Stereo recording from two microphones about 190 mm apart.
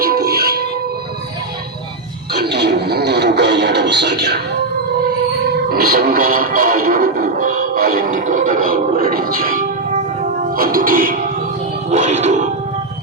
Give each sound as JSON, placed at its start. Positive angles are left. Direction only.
{"t": 0.0, "sound": "music", "side_deg": -55}
{"t": 2.3, "sound": "a sound", "side_deg": -60}
{"t": 5.6, "sound": "music", "side_deg": -50}